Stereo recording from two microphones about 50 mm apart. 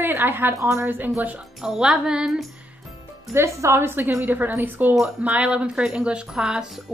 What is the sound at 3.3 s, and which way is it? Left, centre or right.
Speech, right.